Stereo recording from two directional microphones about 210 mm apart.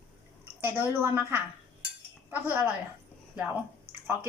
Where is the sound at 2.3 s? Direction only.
10° right (ahead or behind).